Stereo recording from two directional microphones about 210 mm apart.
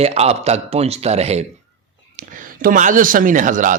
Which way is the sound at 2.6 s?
40° right (ahead or behind).